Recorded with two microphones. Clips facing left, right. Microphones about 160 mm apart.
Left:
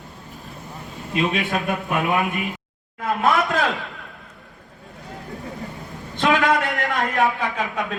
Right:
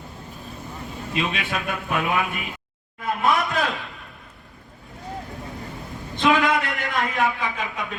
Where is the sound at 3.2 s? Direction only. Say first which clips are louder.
Left 2 dB; 90° left.